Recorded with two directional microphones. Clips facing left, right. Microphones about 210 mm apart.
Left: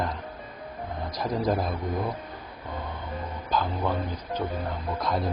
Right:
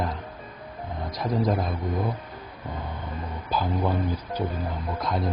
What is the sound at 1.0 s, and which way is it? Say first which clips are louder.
Speech: right 1 dB; centre (ahead or behind).